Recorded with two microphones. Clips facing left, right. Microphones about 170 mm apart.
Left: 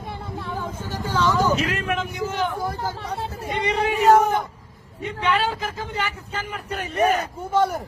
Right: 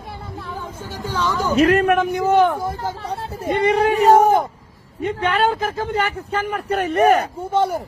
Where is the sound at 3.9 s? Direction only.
35° right (ahead or behind).